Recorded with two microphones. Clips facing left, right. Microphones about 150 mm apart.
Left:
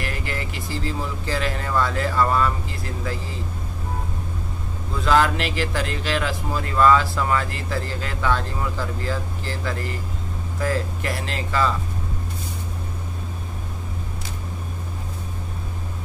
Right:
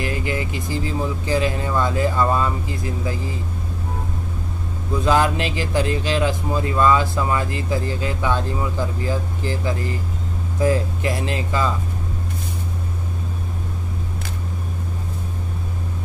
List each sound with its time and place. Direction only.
0.0 s speech: 20° right (ahead or behind)
5.0 s speech: 20° right (ahead or behind)